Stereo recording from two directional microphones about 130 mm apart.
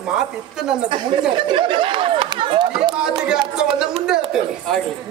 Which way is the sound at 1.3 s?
40° right (ahead or behind).